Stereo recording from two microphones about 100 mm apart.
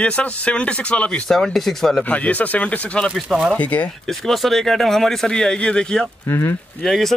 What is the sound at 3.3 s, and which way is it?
Speech, 10° right (ahead or behind).